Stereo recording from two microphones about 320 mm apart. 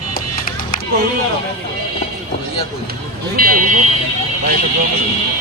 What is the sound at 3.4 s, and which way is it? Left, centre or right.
Speech, right.